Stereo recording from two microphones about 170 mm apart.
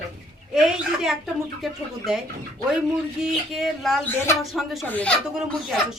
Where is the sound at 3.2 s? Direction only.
Centre (ahead or behind).